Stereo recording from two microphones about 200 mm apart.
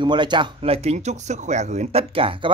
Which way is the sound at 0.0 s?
25° right (ahead or behind).